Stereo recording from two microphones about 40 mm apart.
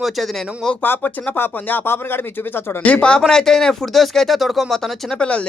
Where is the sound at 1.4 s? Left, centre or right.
Left.